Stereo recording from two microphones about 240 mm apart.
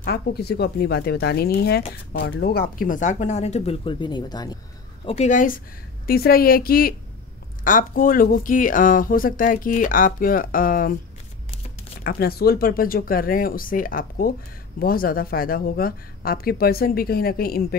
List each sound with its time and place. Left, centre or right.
0.0 s speech: left; by 4.6 s centre
5.0 s speech: left
12.0 s speech: left